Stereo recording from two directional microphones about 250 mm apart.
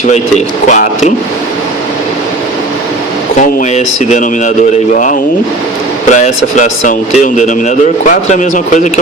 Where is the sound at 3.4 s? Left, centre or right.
Left.